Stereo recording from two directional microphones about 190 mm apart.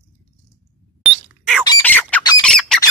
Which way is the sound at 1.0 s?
5° right (ahead or behind).